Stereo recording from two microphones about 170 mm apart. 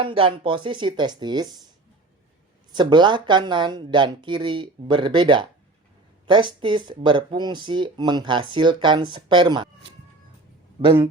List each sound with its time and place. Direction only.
0.0 s speech: 30° right (ahead or behind)
2.7 s speech: 25° right (ahead or behind)